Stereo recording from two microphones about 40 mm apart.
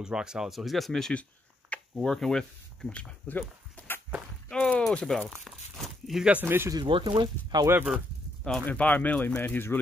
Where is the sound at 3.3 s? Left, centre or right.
Left.